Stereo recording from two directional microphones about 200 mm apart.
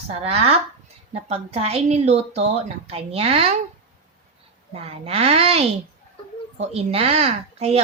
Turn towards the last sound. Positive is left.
turn(degrees=-30)  # may be behind; listen again after turning